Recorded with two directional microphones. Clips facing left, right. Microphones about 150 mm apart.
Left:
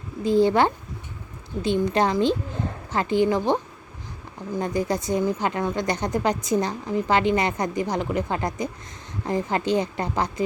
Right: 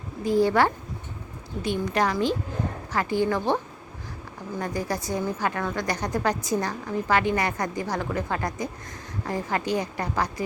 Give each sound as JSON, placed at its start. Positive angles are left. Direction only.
{"t": 0.3, "sound": "a woman's voice", "side_deg": 25}